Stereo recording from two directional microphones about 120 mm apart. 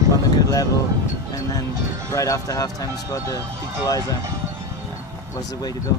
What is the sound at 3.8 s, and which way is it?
Speech, 30° left (ahead or behind).